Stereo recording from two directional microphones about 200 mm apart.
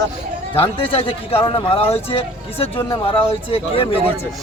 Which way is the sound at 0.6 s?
25° left (ahead or behind).